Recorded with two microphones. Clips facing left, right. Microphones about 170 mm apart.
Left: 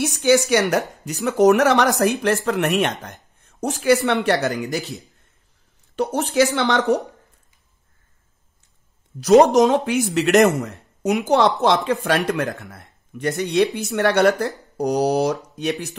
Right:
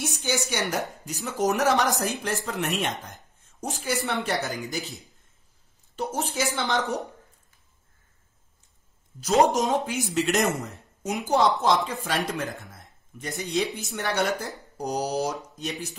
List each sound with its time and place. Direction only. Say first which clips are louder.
0.0 s speech: left 12 dB; 70° left (ahead or behind)
9.5 s speech: left 9 dB; 70° left (ahead or behind)